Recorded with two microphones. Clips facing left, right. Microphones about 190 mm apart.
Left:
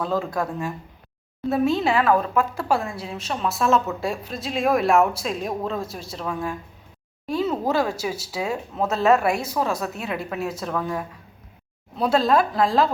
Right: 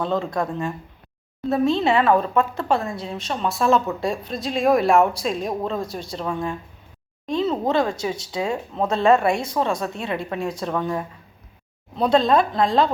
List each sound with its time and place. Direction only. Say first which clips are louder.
0.0 s speech: right 1 dB; 5° left (ahead or behind)